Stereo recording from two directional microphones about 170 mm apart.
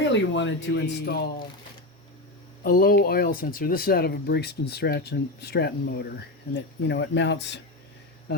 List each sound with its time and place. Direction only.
0.1 s speech: 90° left; by 1.3 s 75° left (ahead or behind)
2.6 s speech: 60° left (ahead or behind); by 6.1 s 75° left (ahead or behind)
6.5 s speech: 90° left